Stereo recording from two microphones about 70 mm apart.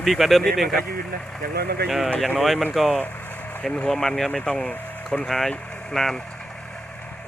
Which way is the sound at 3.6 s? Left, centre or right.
Centre.